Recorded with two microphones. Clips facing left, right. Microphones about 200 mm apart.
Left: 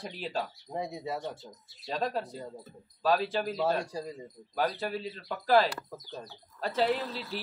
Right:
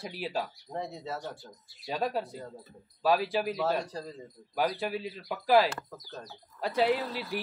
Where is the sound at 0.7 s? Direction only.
15° left (ahead or behind).